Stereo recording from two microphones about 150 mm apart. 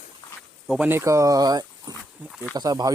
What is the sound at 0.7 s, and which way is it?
Speech, 10° right (ahead or behind).